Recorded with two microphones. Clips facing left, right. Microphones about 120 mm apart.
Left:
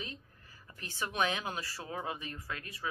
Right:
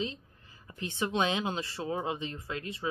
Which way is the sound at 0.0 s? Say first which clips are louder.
Right 9 dB; 20° right (ahead or behind).